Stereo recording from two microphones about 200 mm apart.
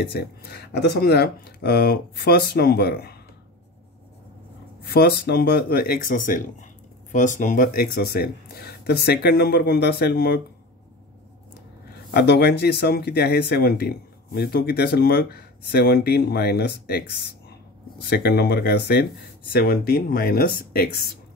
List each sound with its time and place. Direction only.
0.0 s speech: 50° left (ahead or behind)
4.9 s speech: 50° left (ahead or behind)
12.1 s speech: 55° left (ahead or behind)